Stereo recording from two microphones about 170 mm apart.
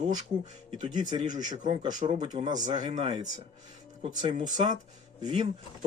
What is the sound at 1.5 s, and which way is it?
A man's voice, 25° right (ahead or behind).